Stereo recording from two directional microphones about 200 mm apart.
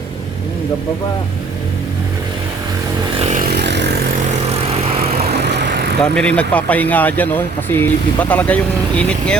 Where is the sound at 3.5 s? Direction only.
55° right (ahead or behind).